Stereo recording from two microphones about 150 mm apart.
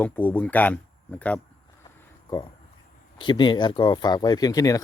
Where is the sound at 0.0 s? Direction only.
10° left (ahead or behind).